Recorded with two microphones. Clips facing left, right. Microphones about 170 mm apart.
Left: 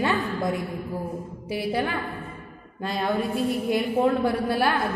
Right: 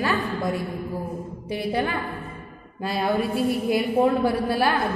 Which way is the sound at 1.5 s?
5° left (ahead or behind).